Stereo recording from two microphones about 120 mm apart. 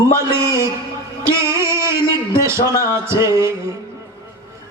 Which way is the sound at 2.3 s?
25° right (ahead or behind).